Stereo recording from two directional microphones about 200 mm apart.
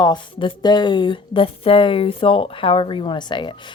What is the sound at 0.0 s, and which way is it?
Speech, 25° left (ahead or behind).